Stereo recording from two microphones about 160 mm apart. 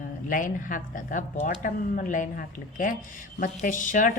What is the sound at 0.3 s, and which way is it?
A woman's voice, 55° left (ahead or behind).